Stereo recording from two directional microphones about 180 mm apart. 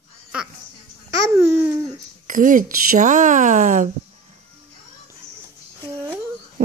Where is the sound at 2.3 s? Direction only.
45° right (ahead or behind).